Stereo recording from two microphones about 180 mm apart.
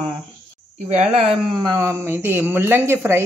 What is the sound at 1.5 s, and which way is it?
Speech, 20° right (ahead or behind).